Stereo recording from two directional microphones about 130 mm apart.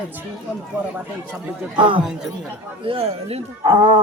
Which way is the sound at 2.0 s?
5° right (ahead or behind).